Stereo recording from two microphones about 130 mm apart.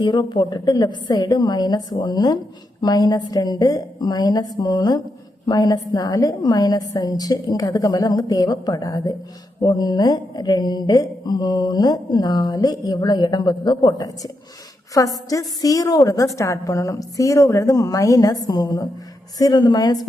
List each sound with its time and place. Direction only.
0.0 s a woman's voice: 35° left (ahead or behind)